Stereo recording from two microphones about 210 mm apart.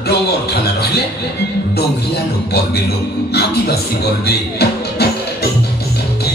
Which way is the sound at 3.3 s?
50° left (ahead or behind).